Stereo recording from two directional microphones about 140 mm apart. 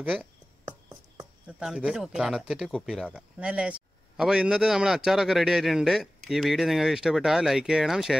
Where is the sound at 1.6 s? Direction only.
5° right (ahead or behind).